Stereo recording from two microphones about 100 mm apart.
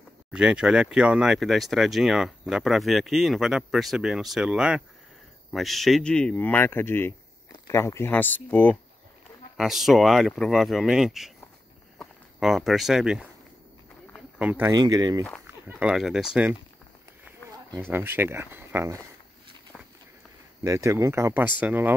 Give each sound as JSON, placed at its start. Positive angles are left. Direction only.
{"t": 0.3, "sound": "speech", "side_deg": -10}
{"t": 9.6, "sound": "speech", "side_deg": -5}
{"t": 12.4, "sound": "speech", "side_deg": -5}
{"t": 14.4, "sound": "speech", "side_deg": -15}
{"t": 14.7, "sound": "speech", "side_deg": -40}
{"t": 15.8, "sound": "speech", "side_deg": -5}
{"t": 17.7, "sound": "speech", "side_deg": -20}
{"t": 20.6, "sound": "speech", "side_deg": -30}